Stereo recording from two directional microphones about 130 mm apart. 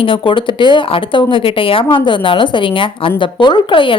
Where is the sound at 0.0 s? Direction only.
40° left (ahead or behind).